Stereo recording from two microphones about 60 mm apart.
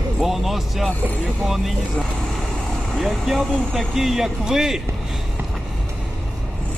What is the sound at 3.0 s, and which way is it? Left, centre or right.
Speech, centre.